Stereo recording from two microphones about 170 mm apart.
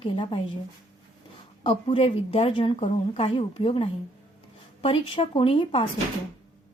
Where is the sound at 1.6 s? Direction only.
30° left (ahead or behind).